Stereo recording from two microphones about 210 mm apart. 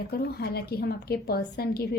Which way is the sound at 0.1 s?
50° left (ahead or behind).